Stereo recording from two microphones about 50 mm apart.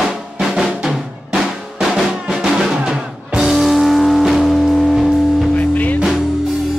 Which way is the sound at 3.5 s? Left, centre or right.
Centre.